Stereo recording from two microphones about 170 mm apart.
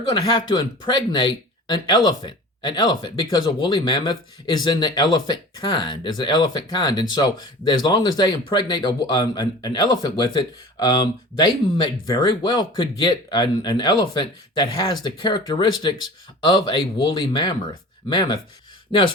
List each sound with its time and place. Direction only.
0.0 s speech: 25° left (ahead or behind)